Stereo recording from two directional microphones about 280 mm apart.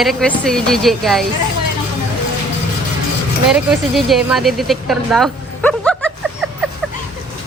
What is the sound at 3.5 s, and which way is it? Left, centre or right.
A woman's voice, centre.